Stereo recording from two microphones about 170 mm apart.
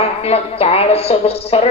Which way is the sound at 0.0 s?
35° left (ahead or behind).